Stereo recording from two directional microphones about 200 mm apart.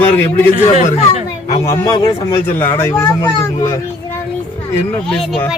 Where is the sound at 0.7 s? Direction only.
35° left (ahead or behind).